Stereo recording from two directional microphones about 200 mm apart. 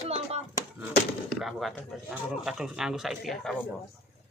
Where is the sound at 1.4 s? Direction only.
Centre (ahead or behind).